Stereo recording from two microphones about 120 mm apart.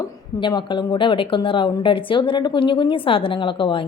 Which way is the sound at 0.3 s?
40° left (ahead or behind).